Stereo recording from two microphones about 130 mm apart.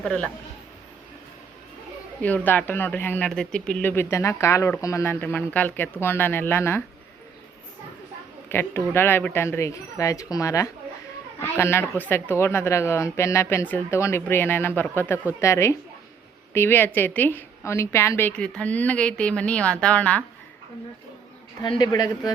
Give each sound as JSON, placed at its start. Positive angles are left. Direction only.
{"t": 0.0, "sound": "a woman's voice", "side_deg": 10}
{"t": 2.2, "sound": "a woman's voice", "side_deg": 15}
{"t": 5.2, "sound": "a woman's voice", "side_deg": 15}
{"t": 8.4, "sound": "a woman's voice", "side_deg": 15}
{"t": 21.6, "sound": "a man's voice", "side_deg": 35}